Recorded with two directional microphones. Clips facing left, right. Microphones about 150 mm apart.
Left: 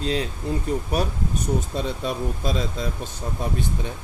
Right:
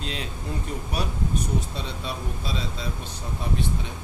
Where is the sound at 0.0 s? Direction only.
35° left (ahead or behind).